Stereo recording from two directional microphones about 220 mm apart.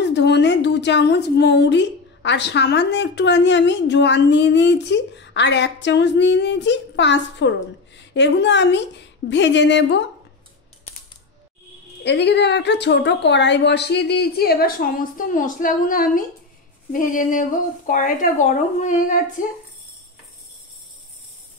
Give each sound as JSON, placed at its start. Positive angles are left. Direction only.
{"t": 0.0, "sound": "a woman's voice", "side_deg": 50}
{"t": 12.0, "sound": "a woman's voice", "side_deg": 50}